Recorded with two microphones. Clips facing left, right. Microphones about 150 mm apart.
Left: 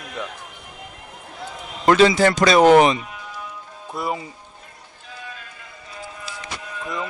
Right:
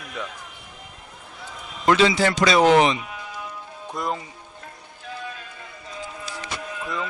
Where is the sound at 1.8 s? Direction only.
45° left (ahead or behind).